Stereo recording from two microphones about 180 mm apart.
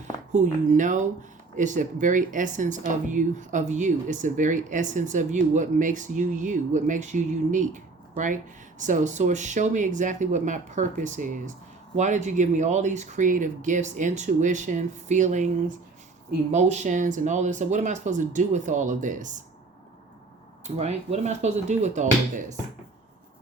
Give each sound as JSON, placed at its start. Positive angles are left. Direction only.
{"t": 0.3, "sound": "speech", "side_deg": -45}
{"t": 16.5, "sound": "speech", "side_deg": -40}
{"t": 20.7, "sound": "speech", "side_deg": -40}